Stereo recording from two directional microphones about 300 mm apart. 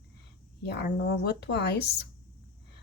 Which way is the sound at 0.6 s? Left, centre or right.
Left.